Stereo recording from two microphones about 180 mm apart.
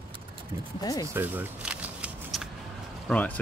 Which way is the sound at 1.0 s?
10° right (ahead or behind).